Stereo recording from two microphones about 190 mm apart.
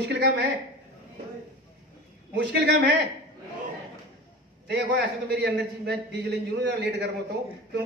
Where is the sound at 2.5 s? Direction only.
70° right (ahead or behind).